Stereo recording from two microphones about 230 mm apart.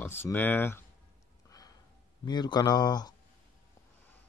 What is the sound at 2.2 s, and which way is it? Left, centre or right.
Speech, centre.